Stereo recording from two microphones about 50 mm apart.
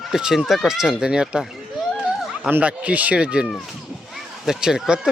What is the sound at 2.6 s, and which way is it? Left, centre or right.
Speech, right.